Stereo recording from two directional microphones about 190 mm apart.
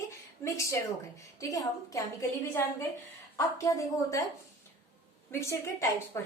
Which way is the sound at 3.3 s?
20° left (ahead or behind).